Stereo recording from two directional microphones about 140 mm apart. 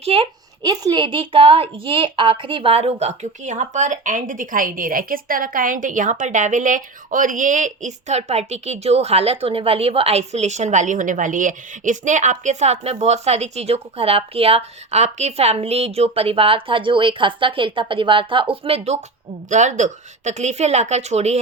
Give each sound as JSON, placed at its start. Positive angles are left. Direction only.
{"t": 0.0, "sound": "a woman's voice", "side_deg": -45}
{"t": 0.6, "sound": "a woman's voice", "side_deg": -30}
{"t": 19.5, "sound": "a woman's voice", "side_deg": -60}